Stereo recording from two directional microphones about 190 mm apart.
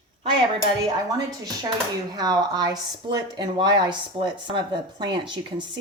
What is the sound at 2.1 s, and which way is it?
Speech, 20° right (ahead or behind).